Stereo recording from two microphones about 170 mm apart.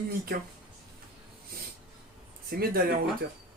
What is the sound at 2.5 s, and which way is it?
Speech, 60° right (ahead or behind).